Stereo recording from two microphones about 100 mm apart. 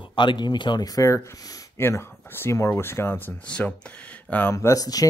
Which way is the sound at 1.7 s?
25° left (ahead or behind).